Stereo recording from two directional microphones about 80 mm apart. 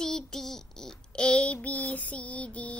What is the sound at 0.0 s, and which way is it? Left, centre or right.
Child singing, centre.